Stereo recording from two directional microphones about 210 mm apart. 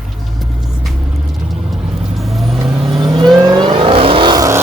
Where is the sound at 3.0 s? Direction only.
20° right (ahead or behind).